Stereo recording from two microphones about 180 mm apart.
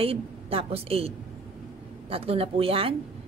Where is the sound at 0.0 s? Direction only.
30° right (ahead or behind).